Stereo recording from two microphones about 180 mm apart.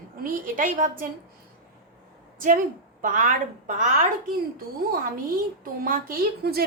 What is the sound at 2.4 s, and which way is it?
A woman's voice, 50° right (ahead or behind).